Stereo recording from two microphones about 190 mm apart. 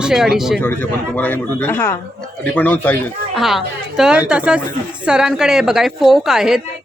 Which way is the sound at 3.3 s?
Centre (ahead or behind).